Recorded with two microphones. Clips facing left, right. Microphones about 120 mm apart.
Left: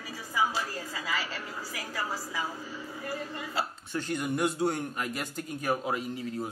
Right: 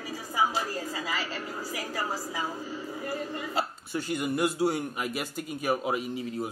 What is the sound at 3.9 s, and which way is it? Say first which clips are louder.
A man's voice: right 2 dB; 5° right (ahead or behind).